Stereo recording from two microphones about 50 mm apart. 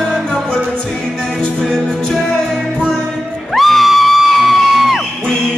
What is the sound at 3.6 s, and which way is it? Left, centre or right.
Music, centre.